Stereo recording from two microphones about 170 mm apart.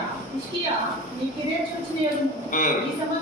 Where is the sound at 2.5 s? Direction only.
50° left (ahead or behind).